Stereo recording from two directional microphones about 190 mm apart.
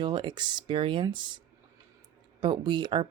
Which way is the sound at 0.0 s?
25° right (ahead or behind).